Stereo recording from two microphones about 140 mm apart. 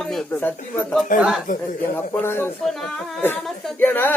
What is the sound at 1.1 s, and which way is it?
Speech, 70° left (ahead or behind).